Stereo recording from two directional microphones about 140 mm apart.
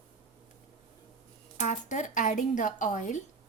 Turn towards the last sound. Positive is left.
turn(degrees=60)  # may be behind; listen again after turning